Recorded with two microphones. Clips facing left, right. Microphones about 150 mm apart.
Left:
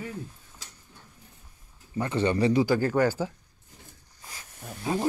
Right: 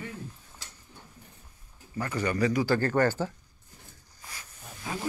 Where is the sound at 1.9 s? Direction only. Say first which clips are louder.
Left 4 dB; 25° left (ahead or behind).